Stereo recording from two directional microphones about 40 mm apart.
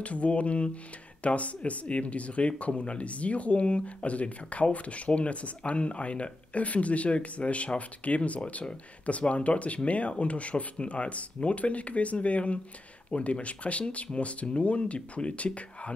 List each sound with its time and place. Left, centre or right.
0.0 s speech: left